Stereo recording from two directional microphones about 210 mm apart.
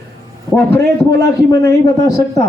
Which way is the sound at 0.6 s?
15° left (ahead or behind).